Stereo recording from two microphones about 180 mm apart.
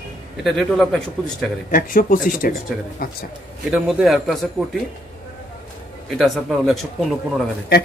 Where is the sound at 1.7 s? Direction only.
50° left (ahead or behind).